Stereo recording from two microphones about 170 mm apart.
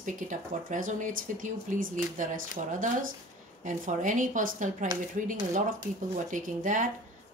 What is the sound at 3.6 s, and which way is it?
Speech, 50° right (ahead or behind).